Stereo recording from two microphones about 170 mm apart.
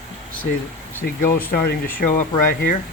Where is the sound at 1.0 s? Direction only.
60° left (ahead or behind).